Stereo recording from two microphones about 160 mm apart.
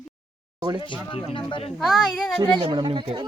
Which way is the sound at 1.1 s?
35° left (ahead or behind).